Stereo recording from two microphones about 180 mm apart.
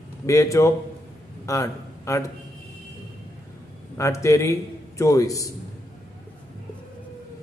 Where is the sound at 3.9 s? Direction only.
15° left (ahead or behind).